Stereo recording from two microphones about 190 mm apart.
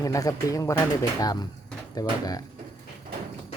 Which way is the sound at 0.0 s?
20° left (ahead or behind).